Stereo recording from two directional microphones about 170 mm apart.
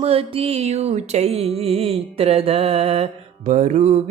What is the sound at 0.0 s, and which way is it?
Mantra, 35° right (ahead or behind).